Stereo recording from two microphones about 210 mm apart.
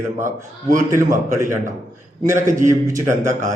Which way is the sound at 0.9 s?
15° right (ahead or behind).